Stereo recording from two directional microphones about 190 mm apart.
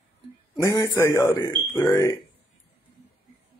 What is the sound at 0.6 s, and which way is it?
Speech, 20° left (ahead or behind).